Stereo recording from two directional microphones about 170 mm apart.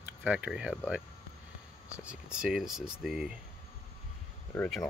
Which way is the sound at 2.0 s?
5° right (ahead or behind).